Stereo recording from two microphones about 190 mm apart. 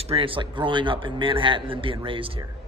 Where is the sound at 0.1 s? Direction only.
30° right (ahead or behind).